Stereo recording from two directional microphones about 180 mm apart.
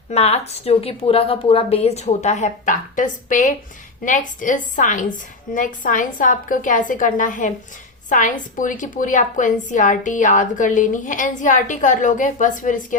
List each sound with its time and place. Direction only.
0.1 s a woman's voice: 35° left (ahead or behind)